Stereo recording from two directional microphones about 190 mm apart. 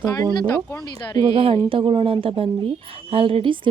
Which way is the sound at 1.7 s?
25° right (ahead or behind).